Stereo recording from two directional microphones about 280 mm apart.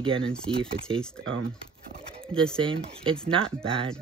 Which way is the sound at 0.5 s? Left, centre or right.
Centre.